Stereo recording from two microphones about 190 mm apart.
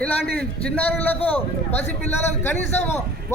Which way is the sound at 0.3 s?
5° left (ahead or behind).